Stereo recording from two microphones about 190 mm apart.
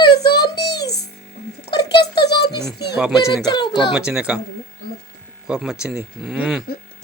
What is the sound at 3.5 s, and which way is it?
Speech, 25° left (ahead or behind).